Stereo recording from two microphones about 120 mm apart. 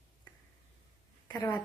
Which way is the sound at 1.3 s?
20° left (ahead or behind).